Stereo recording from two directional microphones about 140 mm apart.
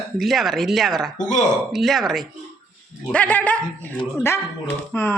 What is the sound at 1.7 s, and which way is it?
Speech, centre (ahead or behind).